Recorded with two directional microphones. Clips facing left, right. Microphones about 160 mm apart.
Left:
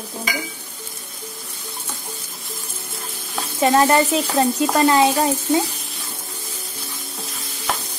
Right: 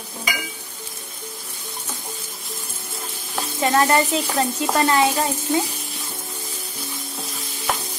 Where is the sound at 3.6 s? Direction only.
20° left (ahead or behind).